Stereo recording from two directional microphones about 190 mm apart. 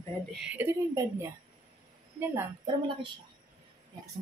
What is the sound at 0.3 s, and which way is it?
Speech, 5° right (ahead or behind).